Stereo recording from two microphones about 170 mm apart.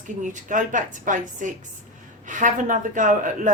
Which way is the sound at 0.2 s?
50° right (ahead or behind).